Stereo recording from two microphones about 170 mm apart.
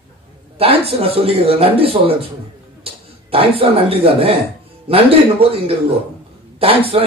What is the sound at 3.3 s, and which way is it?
Speech, 35° right (ahead or behind).